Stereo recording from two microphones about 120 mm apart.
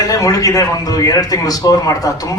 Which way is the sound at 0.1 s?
30° left (ahead or behind).